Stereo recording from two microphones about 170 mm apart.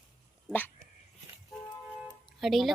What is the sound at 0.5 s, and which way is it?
Dog, 10° left (ahead or behind).